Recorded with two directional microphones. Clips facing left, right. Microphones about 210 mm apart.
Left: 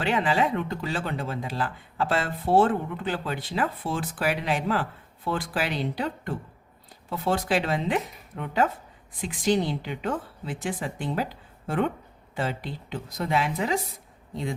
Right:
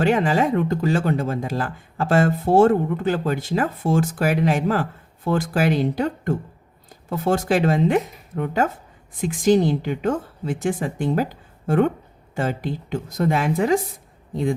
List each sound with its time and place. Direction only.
0.0 s speech: 45° right (ahead or behind)